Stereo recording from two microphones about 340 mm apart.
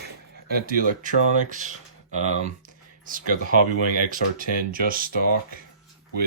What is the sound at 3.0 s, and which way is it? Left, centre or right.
Speech, right.